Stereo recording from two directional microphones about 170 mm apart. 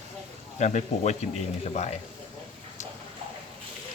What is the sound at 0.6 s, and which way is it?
Speech, 45° left (ahead or behind).